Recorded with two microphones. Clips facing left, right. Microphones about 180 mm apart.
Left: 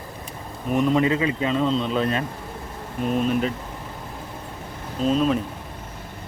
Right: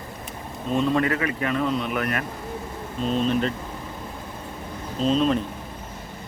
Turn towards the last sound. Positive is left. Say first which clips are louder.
# even
turn(degrees=5)  # may be behind; listen again after turning